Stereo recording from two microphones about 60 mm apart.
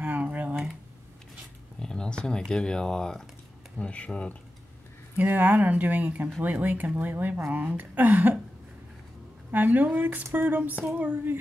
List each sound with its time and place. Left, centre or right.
0.0 s typing: right
1.8 s speech: centre
5.1 s speech: right
7.0 s a sound: right
7.7 s speech: right
9.5 s a sound: right
11.0 s speech: right